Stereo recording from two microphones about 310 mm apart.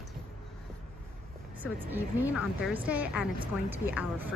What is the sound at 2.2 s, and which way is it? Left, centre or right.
Speech, centre.